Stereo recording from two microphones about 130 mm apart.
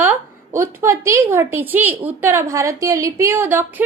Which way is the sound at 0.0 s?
20° right (ahead or behind).